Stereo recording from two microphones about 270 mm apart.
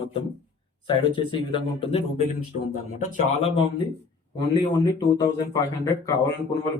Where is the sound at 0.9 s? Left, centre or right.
Centre.